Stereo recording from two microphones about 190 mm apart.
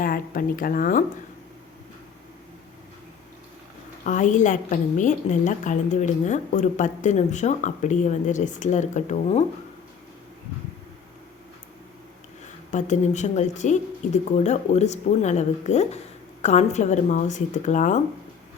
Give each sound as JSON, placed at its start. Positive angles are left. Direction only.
{"t": 0.0, "sound": "speech", "side_deg": 45}
{"t": 4.0, "sound": "a woman's voice", "side_deg": 40}
{"t": 12.7, "sound": "a woman's voice", "side_deg": 40}